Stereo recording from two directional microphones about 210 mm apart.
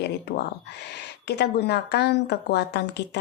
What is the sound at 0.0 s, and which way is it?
A woman's voice, 50° left (ahead or behind).